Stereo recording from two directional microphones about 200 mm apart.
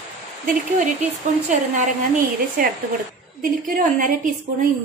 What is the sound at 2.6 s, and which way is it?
A woman's voice, 40° right (ahead or behind).